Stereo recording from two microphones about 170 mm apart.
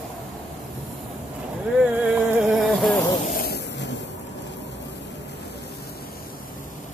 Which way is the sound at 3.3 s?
70° left (ahead or behind).